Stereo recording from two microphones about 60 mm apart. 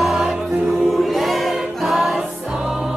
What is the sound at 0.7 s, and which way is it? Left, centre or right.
Choir, centre.